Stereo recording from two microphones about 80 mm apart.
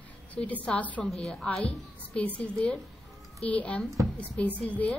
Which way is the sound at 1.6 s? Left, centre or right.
Centre.